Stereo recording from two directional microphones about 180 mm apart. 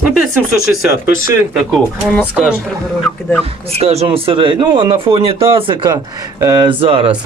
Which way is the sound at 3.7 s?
35° right (ahead or behind).